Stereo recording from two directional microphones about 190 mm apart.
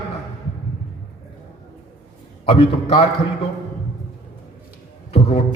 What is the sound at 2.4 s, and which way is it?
Speech, 30° left (ahead or behind).